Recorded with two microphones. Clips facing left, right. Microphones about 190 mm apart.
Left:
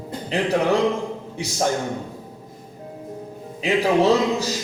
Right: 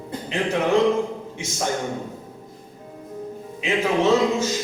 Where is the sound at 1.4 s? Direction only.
35° left (ahead or behind).